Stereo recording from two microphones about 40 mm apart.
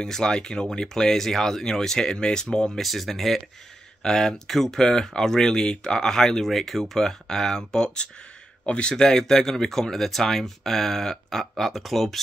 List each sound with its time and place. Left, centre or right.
0.0 s speech: centre
2.8 s speech: centre
6.4 s speech: centre; by 8.9 s left
8.9 s speech: centre